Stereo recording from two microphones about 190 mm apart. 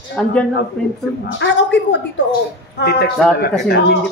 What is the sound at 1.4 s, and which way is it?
Speech, 70° left (ahead or behind).